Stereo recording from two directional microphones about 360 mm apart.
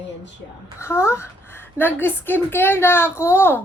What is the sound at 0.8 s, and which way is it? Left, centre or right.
A woman's voice, centre.